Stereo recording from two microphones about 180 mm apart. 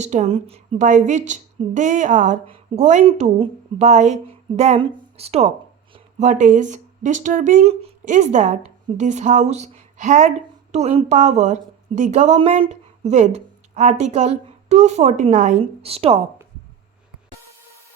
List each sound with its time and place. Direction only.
0.0 s a woman's voice: 40° right (ahead or behind)